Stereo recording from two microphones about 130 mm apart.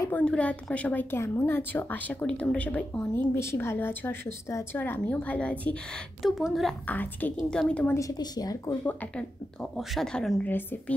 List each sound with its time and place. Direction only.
0.1 s a woman's voice: 10° left (ahead or behind)
6.9 s a woman's voice: 15° left (ahead or behind)
8.0 s a woman's voice: 30° left (ahead or behind)
8.8 s speech: 10° left (ahead or behind)
10.5 s a woman's voice: 15° left (ahead or behind)